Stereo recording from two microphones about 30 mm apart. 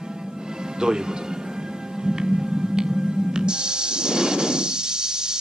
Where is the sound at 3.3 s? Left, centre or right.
Right.